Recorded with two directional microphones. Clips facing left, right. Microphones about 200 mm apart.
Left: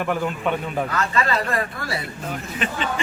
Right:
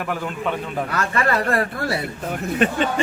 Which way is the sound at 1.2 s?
55° right (ahead or behind).